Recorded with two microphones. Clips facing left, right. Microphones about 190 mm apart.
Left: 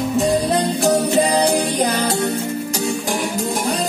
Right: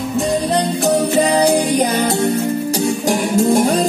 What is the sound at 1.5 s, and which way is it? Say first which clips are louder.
Music: right 3 dB; 20° right (ahead or behind).